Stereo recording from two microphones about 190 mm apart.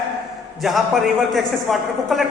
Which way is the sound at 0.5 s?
Centre (ahead or behind).